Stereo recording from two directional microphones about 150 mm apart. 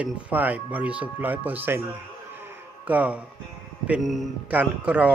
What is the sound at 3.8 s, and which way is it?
A man's voice, 5° right (ahead or behind).